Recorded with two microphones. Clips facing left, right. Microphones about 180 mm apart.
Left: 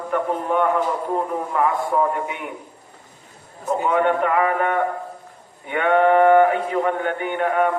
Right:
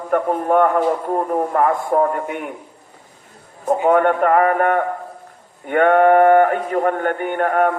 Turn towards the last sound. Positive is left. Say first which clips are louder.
# right 3 dB
turn(degrees=-50)  # may be behind; listen again after turning